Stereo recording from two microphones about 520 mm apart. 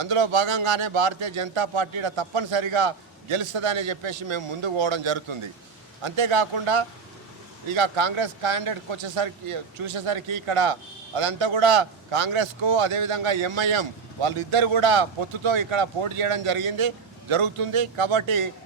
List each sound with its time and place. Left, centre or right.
0.0 s speech: right
6.0 s speech: right